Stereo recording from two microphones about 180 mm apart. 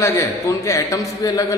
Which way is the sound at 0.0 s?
15° left (ahead or behind).